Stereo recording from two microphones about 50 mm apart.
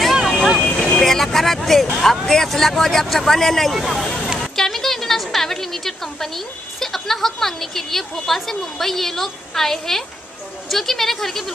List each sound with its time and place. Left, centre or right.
0.0 s vehicle: centre
0.6 s vehicle: centre
0.9 s a woman's voice: centre